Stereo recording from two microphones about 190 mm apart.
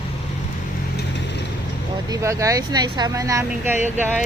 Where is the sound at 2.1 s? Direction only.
15° right (ahead or behind).